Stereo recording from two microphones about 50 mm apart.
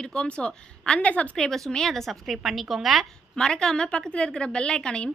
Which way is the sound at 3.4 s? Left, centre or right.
Centre.